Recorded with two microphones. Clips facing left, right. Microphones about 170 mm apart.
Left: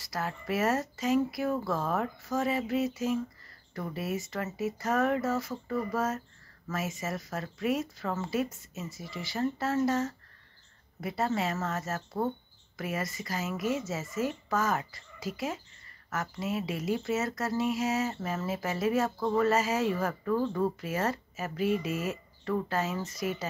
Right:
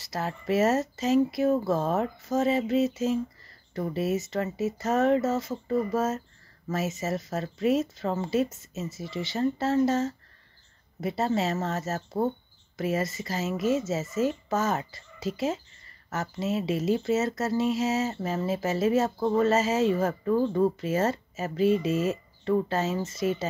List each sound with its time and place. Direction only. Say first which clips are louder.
0.0 s speech: right 3 dB; 25° right (ahead or behind)